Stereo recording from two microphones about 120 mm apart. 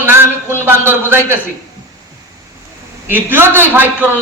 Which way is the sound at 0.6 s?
15° right (ahead or behind).